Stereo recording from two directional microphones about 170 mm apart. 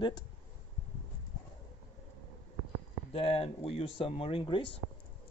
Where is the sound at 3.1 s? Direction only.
35° left (ahead or behind).